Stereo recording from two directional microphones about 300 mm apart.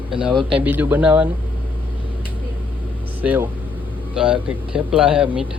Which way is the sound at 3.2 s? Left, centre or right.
Centre.